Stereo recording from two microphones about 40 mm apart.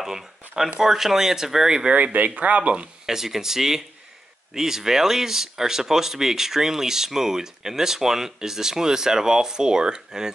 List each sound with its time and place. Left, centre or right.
0.0 s speech: centre
2.1 s speech: right
3.1 s speech: centre